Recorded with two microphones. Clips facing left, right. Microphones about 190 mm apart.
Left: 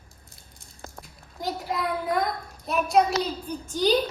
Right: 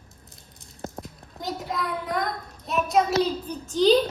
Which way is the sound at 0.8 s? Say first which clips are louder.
Right 8 dB; 40° right (ahead or behind).